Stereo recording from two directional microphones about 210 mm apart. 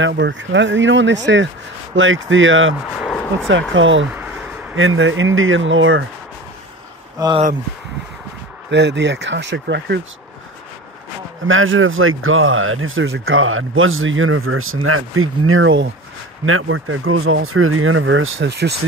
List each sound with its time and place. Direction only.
0.0 s speech: 60° right (ahead or behind)
3.0 s a sound: centre (ahead or behind)
3.7 s speech: 65° right (ahead or behind)
7.2 s speech: 20° right (ahead or behind)
8.6 s speech: 55° right (ahead or behind)
11.4 s speech: 70° right (ahead or behind)
16.4 s speech: 75° right (ahead or behind); by 18.7 s 55° right (ahead or behind)